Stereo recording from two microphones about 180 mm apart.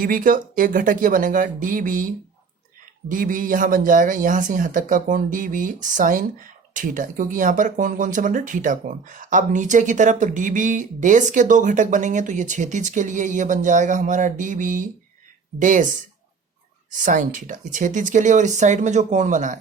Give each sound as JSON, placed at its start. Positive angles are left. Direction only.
{"t": 0.0, "sound": "speech", "side_deg": -50}
{"t": 3.1, "sound": "speech", "side_deg": -50}
{"t": 17.1, "sound": "speech", "side_deg": -45}